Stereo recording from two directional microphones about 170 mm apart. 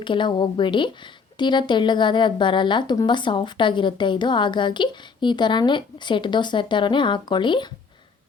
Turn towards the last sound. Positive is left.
turn(degrees=25)  # may be behind; listen again after turning